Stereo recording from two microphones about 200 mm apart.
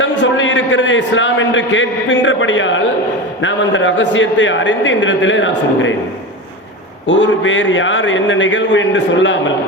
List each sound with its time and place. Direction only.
0.0 s a man's voice: 70° left (ahead or behind)
7.1 s a man's voice: 70° left (ahead or behind)